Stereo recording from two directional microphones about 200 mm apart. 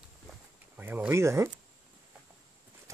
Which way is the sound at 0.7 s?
10° right (ahead or behind).